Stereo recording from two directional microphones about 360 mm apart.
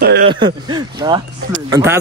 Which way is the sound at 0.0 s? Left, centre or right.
Right.